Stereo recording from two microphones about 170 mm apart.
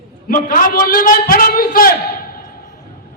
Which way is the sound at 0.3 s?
55° left (ahead or behind).